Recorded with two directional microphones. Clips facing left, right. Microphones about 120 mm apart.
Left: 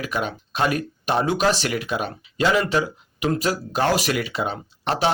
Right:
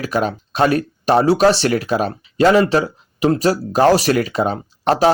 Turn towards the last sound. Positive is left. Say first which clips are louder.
# right 7 dB
turn(degrees=-40)  # may be behind; listen again after turning